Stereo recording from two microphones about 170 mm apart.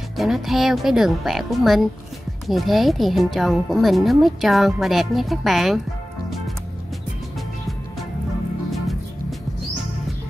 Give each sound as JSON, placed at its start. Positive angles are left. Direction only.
{"t": 0.2, "sound": "a woman's voice", "side_deg": 0}